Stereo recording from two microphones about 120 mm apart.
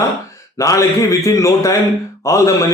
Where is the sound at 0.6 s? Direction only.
25° left (ahead or behind).